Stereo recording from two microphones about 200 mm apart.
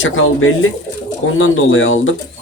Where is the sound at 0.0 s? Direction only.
80° left.